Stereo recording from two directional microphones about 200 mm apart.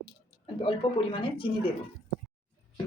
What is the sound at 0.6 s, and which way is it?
Speech, 25° left (ahead or behind).